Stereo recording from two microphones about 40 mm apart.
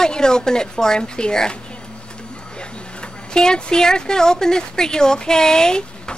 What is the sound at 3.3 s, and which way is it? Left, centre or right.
Speech, centre.